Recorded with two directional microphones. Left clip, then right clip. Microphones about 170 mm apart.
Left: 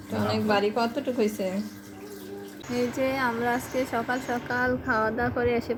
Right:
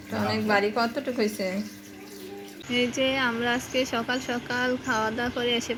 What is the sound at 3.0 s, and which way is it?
Speech, 20° right (ahead or behind).